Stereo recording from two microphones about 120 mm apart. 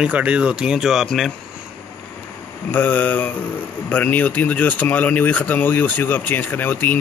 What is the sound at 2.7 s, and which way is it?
Speech, 15° left (ahead or behind).